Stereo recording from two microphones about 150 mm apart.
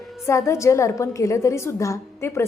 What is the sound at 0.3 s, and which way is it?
A woman's voice, 20° left (ahead or behind).